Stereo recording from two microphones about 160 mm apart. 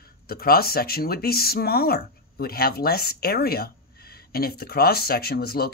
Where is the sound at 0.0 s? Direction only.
70° left (ahead or behind).